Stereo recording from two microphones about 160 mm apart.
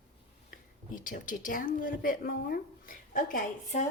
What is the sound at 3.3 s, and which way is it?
Speech, 45° left (ahead or behind).